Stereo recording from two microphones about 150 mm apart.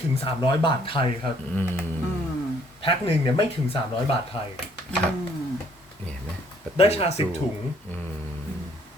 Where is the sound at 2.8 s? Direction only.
40° left (ahead or behind).